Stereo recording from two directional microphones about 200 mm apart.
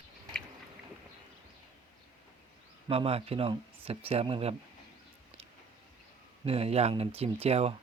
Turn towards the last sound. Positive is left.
turn(degrees=-30)  # may be behind; listen again after turning